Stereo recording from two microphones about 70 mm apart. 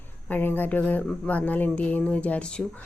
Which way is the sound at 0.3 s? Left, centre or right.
Left.